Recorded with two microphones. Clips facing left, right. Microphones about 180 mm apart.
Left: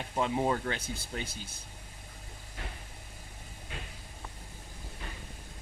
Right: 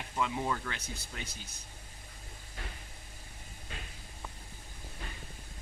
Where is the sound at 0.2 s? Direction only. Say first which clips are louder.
Left 4 dB; 35° left (ahead or behind).